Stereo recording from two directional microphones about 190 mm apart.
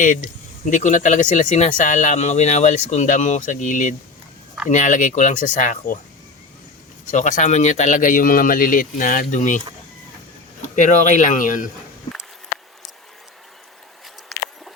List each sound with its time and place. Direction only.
0.6 s speech: 40° left (ahead or behind)
7.1 s speech: 40° left (ahead or behind)
10.6 s speech: 40° left (ahead or behind)